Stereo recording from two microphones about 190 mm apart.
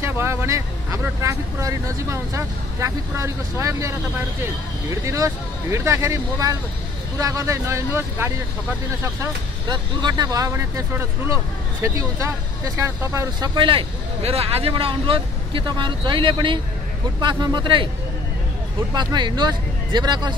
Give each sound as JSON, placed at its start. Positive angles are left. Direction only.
{"t": 0.0, "sound": "speech", "side_deg": -15}
{"t": 5.0, "sound": "speech", "side_deg": -15}
{"t": 18.9, "sound": "speech", "side_deg": -25}